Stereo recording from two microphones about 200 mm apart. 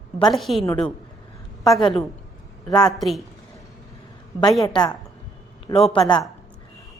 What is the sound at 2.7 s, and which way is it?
Speech, 20° left (ahead or behind).